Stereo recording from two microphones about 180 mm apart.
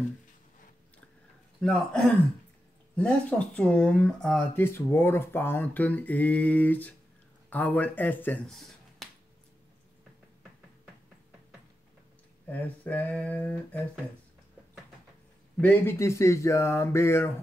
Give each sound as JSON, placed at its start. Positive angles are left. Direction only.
{"t": 1.6, "sound": "a man's voice", "side_deg": 0}
{"t": 9.0, "sound": "finger snapping", "side_deg": 0}
{"t": 12.4, "sound": "speech", "side_deg": 10}
{"t": 15.6, "sound": "speech", "side_deg": 15}